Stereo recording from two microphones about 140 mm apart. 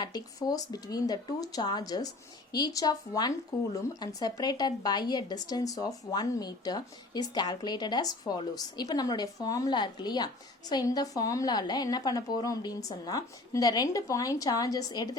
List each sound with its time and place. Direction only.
0.0 s speech: 30° left (ahead or behind)